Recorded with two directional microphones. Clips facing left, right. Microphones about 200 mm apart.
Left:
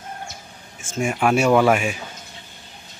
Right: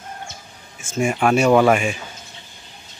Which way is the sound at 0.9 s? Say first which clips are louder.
Right 2 dB; centre (ahead or behind).